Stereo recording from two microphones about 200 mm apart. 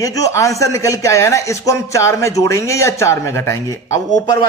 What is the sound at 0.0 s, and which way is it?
A man's voice, 15° left (ahead or behind).